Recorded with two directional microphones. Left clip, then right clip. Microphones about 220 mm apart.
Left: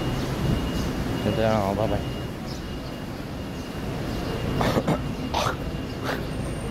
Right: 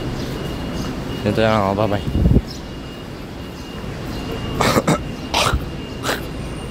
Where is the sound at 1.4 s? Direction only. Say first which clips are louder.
Right 7 dB; 20° right (ahead or behind).